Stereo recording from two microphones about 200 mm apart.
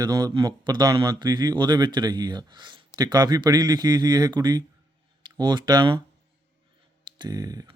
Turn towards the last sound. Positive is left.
turn(degrees=-20)  # may be behind; listen again after turning